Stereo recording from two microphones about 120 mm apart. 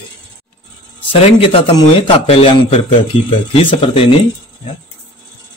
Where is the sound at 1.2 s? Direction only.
50° left (ahead or behind).